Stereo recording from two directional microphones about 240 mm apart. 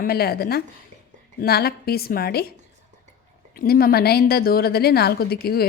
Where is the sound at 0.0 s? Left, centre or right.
Left.